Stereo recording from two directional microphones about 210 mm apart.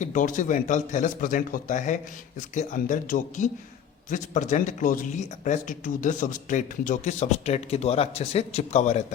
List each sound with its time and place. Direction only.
0.0 s speech: 35° left (ahead or behind)